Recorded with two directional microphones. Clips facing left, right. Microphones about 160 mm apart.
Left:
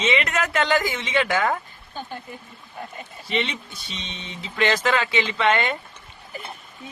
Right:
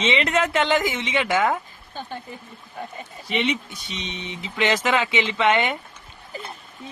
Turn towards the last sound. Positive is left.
turn(degrees=-15)  # may be behind; listen again after turning